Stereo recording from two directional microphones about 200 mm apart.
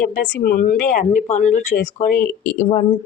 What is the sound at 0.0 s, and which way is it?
Speech, 45° left (ahead or behind).